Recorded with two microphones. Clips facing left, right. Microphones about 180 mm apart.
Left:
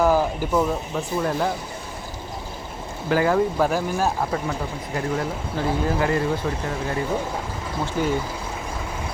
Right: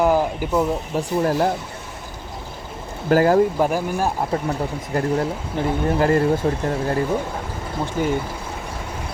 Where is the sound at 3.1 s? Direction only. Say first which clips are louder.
Right 4 dB; 45° right (ahead or behind).